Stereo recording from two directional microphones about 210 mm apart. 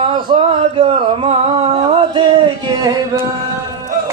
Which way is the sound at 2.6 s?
15° right (ahead or behind).